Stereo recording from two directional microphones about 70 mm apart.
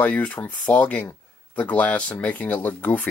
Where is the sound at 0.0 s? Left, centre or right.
Left.